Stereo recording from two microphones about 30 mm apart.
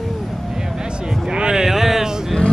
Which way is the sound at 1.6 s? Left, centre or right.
Centre.